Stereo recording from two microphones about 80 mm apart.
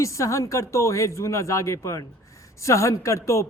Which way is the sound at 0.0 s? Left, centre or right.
Left.